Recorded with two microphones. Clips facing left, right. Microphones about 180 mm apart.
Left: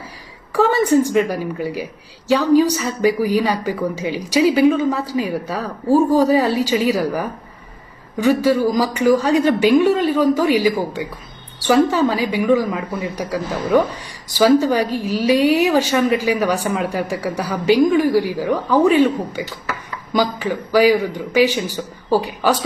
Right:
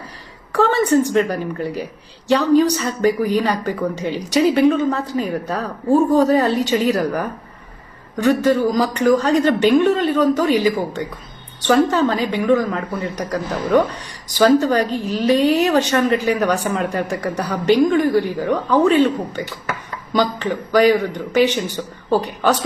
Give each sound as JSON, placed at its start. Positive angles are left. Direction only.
{"t": 0.5, "sound": "a woman's voice", "side_deg": 10}